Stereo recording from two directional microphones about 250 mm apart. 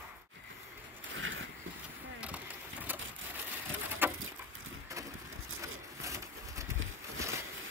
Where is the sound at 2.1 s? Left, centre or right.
Centre.